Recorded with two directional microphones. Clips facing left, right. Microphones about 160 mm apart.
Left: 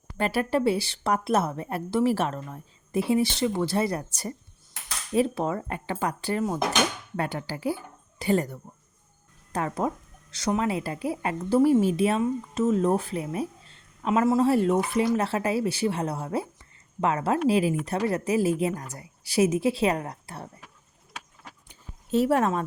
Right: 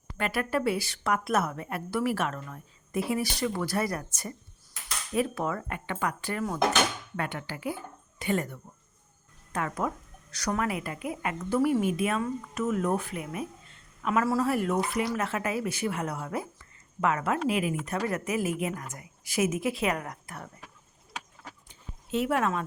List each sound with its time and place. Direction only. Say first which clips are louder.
0.2 s a woman's voice: left 4 dB; 30° left (ahead or behind)
22.1 s speech: left 5 dB; 35° left (ahead or behind)